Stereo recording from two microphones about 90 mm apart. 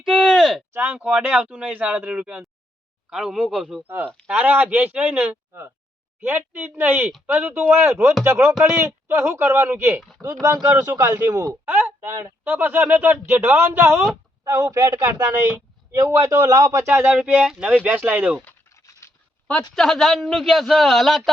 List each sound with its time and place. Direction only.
0.0 s a sound: centre (ahead or behind)
0.7 s a sound: 25° right (ahead or behind)
0.9 s a man's voice: 15° right (ahead or behind); by 3.8 s centre (ahead or behind)
3.8 s speech: 25° right (ahead or behind)
10.5 s speech: 10° right (ahead or behind)
10.8 s speech: 45° right (ahead or behind)
11.6 s speech: 25° right (ahead or behind)
15.0 s speech: 25° right (ahead or behind)
15.9 s speech: 35° right (ahead or behind)
17.2 s speech: 15° right (ahead or behind)
18.7 s a sound: 35° left (ahead or behind)
19.7 s a man's voice: 5° left (ahead or behind)